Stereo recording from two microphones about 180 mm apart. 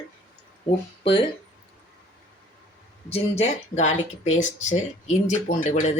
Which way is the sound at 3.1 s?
40° left (ahead or behind).